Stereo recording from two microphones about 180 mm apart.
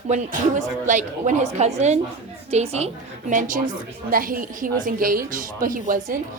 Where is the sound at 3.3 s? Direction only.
45° right (ahead or behind).